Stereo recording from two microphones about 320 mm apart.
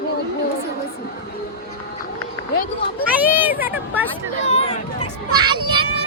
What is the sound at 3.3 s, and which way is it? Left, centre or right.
Speech, centre.